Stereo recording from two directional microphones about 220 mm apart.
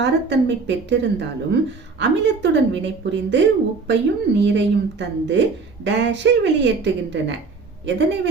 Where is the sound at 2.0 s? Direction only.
50° right (ahead or behind).